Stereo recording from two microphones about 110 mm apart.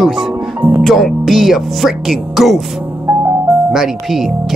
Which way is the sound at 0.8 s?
Centre (ahead or behind).